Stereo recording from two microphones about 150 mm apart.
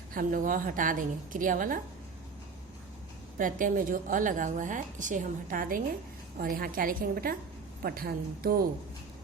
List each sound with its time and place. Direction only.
0.1 s a woman's voice: 65° right (ahead or behind)
3.3 s a woman's voice: 65° right (ahead or behind); by 8.6 s 80° right